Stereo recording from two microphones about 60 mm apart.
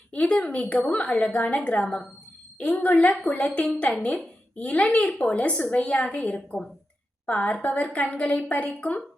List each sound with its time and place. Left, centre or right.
0.1 s a woman's voice: centre
2.6 s a woman's voice: left